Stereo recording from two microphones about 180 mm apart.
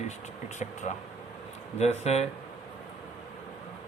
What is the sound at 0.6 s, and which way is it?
Speech, 40° left (ahead or behind).